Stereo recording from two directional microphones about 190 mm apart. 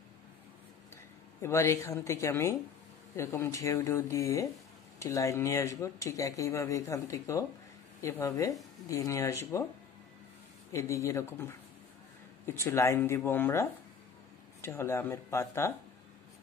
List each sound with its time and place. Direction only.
1.4 s speech: 15° left (ahead or behind)
10.7 s speech: 15° left (ahead or behind)